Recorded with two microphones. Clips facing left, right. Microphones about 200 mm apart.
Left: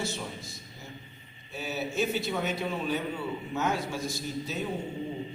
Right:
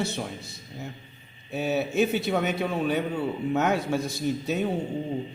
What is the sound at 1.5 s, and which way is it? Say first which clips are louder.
A man's voice: right 7 dB; 60° right (ahead or behind).